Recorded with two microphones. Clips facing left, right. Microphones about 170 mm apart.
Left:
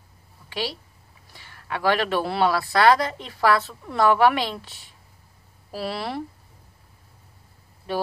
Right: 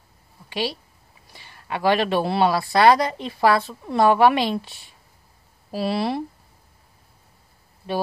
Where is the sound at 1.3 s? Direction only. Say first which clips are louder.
Right 2 dB; 20° right (ahead or behind).